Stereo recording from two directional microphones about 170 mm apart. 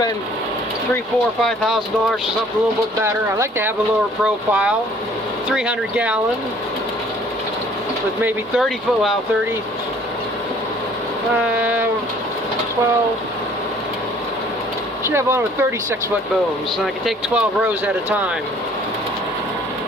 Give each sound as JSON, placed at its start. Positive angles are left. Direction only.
{"t": 1.4, "sound": "speech", "side_deg": 0}
{"t": 3.0, "sound": "speech", "side_deg": -15}
{"t": 4.2, "sound": "speech", "side_deg": -5}
{"t": 8.2, "sound": "speech", "side_deg": 0}
{"t": 11.5, "sound": "speech", "side_deg": -10}
{"t": 15.0, "sound": "speech", "side_deg": -15}
{"t": 16.8, "sound": "speech", "side_deg": -5}